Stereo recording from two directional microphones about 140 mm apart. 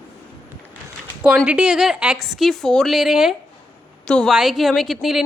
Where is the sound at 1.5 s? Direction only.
5° right (ahead or behind).